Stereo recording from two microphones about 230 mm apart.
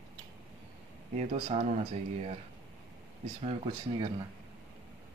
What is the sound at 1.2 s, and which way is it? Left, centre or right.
Speech, right.